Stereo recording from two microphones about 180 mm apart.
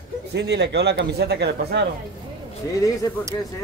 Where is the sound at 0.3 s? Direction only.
70° right (ahead or behind).